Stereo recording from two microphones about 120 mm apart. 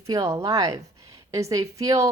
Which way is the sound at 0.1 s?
25° right (ahead or behind).